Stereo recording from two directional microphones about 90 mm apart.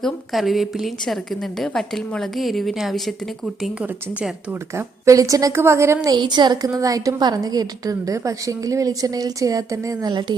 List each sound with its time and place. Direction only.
0.0 s a woman's voice: centre (ahead or behind)
5.0 s a woman's voice: 35° right (ahead or behind)
6.7 s a woman's voice: 40° right (ahead or behind); by 10.3 s 55° right (ahead or behind)